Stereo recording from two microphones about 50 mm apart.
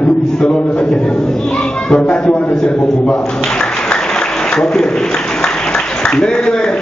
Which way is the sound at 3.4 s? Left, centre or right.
Centre.